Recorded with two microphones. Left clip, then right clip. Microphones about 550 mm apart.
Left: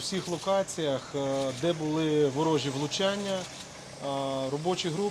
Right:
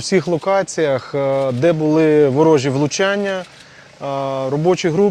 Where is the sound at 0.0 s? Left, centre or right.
Right.